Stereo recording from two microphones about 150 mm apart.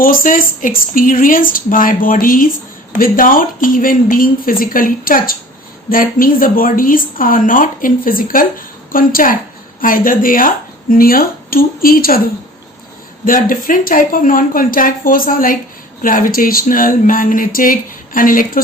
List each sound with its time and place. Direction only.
0.0 s speech: 65° left (ahead or behind)